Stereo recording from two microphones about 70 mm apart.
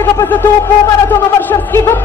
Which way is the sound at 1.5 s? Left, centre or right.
Left.